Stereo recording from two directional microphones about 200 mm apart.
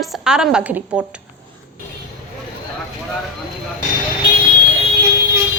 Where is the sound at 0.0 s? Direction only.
5° right (ahead or behind).